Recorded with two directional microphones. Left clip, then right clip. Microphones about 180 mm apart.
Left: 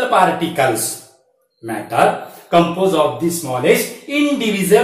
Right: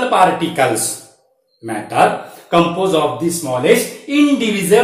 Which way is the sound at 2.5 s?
25° right (ahead or behind).